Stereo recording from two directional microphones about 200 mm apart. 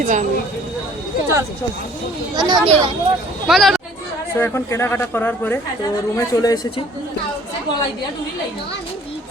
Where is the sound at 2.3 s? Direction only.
20° right (ahead or behind).